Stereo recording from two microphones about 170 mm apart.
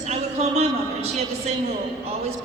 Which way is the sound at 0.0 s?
40° right (ahead or behind).